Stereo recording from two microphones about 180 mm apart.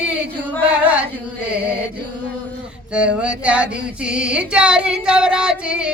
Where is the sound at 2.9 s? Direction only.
5° right (ahead or behind).